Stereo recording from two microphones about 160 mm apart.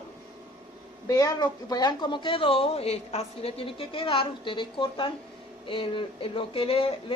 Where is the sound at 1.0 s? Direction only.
20° left (ahead or behind).